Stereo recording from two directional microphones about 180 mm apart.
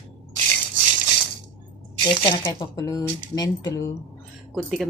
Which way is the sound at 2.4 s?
20° left (ahead or behind).